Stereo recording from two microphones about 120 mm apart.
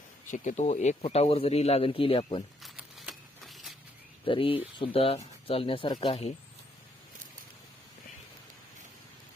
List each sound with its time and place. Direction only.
0.3 s speech: 90° left; by 2.4 s 50° left (ahead or behind)
2.6 s a sound: 5° right (ahead or behind)
4.3 s speech: 45° left (ahead or behind)